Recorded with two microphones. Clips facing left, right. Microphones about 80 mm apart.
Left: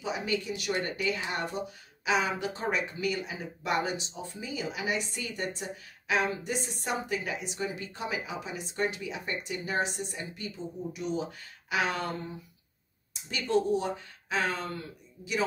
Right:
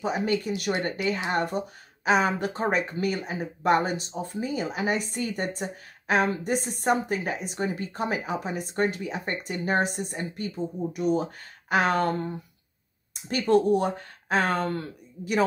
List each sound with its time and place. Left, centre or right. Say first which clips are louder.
0.0 s speech: right 6 dB; right